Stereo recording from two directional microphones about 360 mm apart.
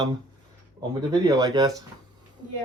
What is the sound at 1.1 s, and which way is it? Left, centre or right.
Speech, centre.